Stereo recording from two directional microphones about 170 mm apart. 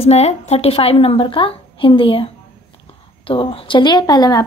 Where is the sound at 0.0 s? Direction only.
40° left (ahead or behind).